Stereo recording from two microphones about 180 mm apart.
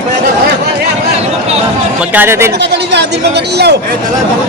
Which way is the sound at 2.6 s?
70° right (ahead or behind).